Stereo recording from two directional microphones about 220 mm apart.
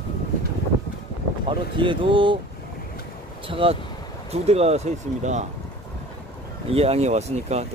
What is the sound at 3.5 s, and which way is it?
Speech, 25° right (ahead or behind).